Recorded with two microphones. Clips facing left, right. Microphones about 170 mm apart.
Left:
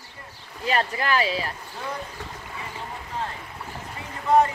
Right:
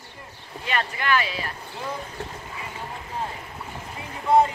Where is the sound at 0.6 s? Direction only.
35° left (ahead or behind).